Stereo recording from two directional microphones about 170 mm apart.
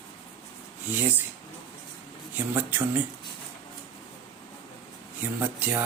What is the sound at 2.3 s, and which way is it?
Speech, 10° right (ahead or behind).